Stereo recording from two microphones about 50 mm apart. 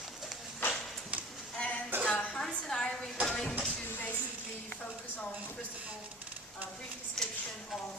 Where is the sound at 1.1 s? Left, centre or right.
Right.